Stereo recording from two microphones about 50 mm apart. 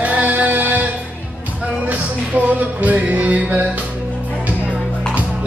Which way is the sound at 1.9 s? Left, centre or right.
Right.